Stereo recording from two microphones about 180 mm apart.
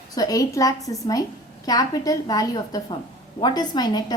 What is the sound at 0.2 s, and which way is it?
A woman's voice, 20° left (ahead or behind).